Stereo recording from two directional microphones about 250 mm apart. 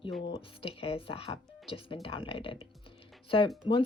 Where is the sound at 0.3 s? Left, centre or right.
Left.